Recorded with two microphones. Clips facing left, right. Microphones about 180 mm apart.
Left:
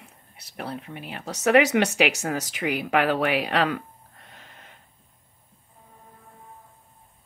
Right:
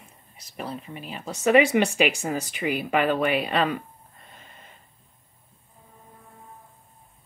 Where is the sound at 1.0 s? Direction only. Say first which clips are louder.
Even; 70° left (ahead or behind).